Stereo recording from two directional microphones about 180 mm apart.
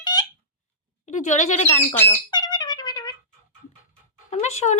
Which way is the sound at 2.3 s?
25° left (ahead or behind).